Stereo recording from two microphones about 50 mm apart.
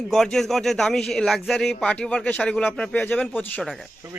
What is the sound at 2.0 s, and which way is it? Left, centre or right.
Speech, left.